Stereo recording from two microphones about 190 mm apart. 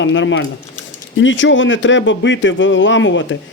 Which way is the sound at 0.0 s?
75° left (ahead or behind).